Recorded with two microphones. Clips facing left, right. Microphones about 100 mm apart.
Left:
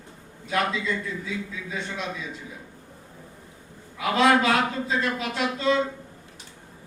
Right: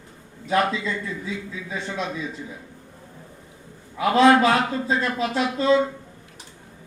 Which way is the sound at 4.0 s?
35° right (ahead or behind).